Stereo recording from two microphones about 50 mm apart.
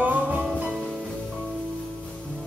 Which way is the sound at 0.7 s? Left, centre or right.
Centre.